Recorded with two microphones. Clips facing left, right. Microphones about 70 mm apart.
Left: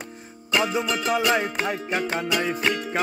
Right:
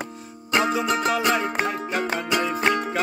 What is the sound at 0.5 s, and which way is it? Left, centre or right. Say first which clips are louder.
Music: right 2 dB; right.